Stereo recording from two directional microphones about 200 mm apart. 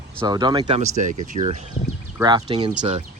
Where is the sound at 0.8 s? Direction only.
40° right (ahead or behind).